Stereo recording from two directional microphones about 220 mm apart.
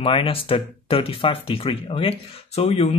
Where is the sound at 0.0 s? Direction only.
25° left (ahead or behind).